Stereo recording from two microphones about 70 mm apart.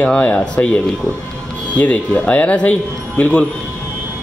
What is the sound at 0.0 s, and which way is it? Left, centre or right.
Speech, centre.